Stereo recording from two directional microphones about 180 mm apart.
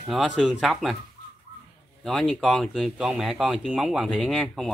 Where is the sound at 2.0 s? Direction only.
Centre (ahead or behind).